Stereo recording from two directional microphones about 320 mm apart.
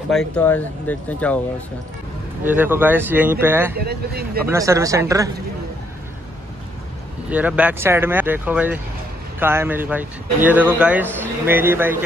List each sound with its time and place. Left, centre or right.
0.1 s speech: centre
2.4 s speech: centre
3.7 s speech: right
4.5 s speech: centre
7.2 s speech: centre